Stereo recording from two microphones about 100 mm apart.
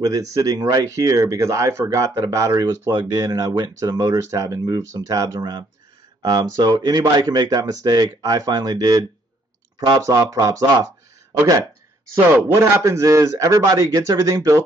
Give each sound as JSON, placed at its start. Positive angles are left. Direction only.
{"t": 0.0, "sound": "speech", "side_deg": -35}
{"t": 12.4, "sound": "speech", "side_deg": -25}